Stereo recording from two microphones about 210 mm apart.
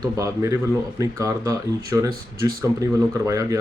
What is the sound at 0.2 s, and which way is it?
Speech, 15° right (ahead or behind).